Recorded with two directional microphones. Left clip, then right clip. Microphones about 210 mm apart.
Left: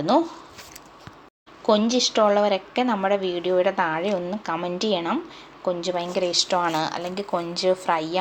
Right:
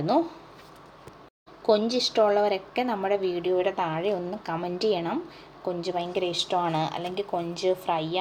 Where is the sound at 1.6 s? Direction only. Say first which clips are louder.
Left 3 dB; 15° left (ahead or behind).